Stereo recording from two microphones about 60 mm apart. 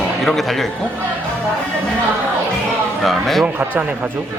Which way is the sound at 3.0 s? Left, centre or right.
Centre.